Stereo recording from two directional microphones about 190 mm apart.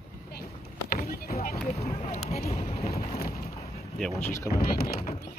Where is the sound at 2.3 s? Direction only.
35° left (ahead or behind).